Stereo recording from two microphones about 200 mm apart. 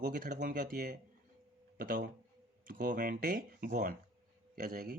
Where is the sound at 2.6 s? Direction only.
40° right (ahead or behind).